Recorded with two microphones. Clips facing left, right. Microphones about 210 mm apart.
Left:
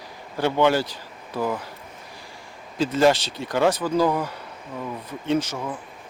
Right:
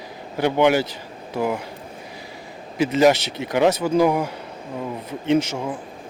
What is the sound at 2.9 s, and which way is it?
Speech, 20° right (ahead or behind).